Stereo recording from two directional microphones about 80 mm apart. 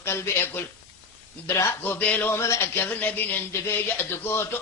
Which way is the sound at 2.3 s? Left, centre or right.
Left.